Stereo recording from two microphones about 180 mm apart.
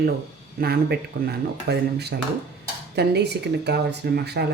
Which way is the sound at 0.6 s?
60° right (ahead or behind).